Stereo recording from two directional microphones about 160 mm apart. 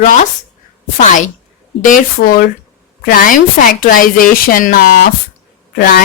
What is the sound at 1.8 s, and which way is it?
Speech, 60° left (ahead or behind).